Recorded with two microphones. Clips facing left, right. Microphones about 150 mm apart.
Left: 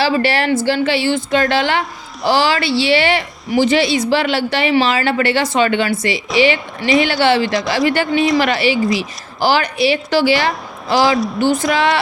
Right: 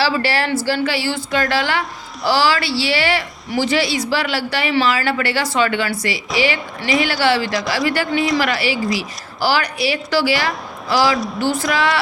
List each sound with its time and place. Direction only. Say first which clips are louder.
0.0 s a woman's voice: left 3 dB; 20° left (ahead or behind)